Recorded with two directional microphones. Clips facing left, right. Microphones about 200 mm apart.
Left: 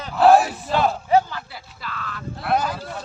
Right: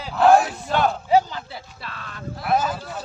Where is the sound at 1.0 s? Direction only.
15° right (ahead or behind).